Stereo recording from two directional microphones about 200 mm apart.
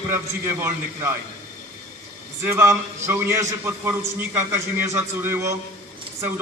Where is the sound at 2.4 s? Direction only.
10° right (ahead or behind).